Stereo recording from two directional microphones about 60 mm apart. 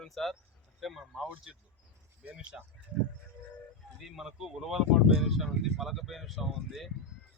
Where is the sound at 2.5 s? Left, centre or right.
Centre.